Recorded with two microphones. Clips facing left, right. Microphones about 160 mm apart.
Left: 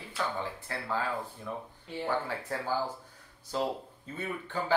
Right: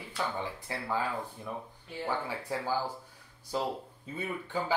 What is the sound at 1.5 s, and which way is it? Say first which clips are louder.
Speech: left 1 dB; 15° right (ahead or behind).